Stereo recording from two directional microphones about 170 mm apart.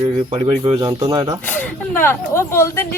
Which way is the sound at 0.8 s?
25° right (ahead or behind).